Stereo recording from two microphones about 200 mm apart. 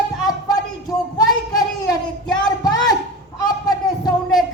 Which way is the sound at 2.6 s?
20° left (ahead or behind).